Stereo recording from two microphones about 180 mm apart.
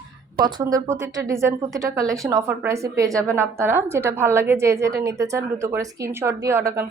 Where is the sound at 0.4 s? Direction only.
20° right (ahead or behind).